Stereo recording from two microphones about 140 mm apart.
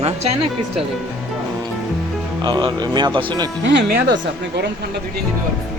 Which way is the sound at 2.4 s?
35° right (ahead or behind).